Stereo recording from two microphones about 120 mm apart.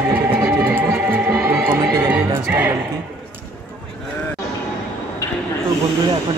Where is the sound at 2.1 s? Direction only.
15° right (ahead or behind).